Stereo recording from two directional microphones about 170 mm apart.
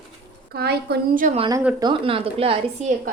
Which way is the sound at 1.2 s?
40° right (ahead or behind).